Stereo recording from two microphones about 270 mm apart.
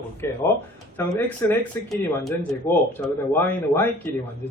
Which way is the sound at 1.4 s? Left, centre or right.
Centre.